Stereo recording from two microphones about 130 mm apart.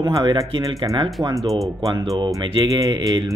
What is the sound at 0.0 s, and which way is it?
Speech, 30° right (ahead or behind).